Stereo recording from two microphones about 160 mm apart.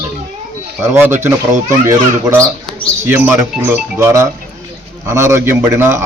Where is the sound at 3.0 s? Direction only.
15° right (ahead or behind).